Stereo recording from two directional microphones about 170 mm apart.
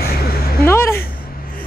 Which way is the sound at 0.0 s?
65° left (ahead or behind).